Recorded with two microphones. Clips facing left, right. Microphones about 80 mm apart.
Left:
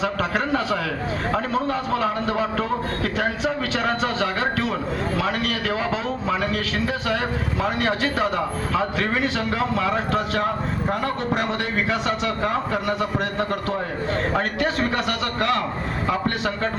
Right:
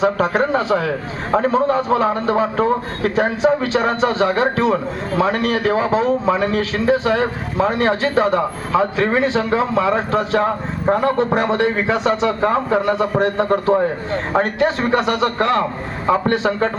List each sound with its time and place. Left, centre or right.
0.0 s a man's voice: right